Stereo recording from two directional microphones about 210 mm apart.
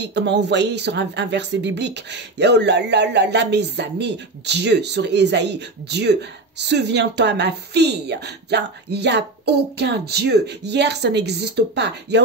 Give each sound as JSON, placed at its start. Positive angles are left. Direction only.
{"t": 0.0, "sound": "speech", "side_deg": -55}